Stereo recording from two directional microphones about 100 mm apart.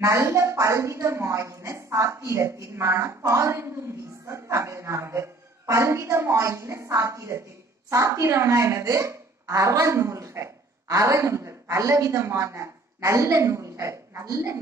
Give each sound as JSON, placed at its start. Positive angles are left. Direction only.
{"t": 0.0, "sound": "a woman's voice", "side_deg": -30}